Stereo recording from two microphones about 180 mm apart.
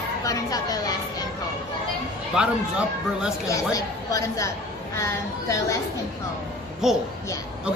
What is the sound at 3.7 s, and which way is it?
Speech, 20° left (ahead or behind).